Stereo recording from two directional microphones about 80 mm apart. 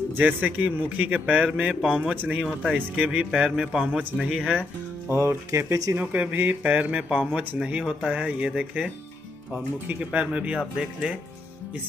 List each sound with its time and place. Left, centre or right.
0.2 s a man's voice: right
5.1 s speech: right
5.9 s speech: right; by 11.1 s centre